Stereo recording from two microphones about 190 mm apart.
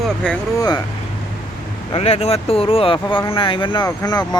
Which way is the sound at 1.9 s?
30° left (ahead or behind).